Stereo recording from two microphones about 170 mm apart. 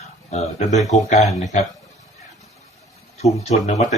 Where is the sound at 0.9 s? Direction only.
45° left (ahead or behind).